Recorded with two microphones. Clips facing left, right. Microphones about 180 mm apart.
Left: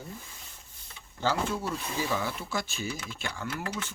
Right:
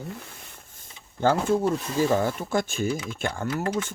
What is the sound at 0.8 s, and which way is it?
Speech, 50° right (ahead or behind).